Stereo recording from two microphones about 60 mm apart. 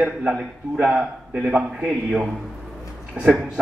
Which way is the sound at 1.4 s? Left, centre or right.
Centre.